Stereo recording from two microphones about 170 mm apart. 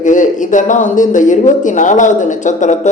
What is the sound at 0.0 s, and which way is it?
Speech, 50° left (ahead or behind).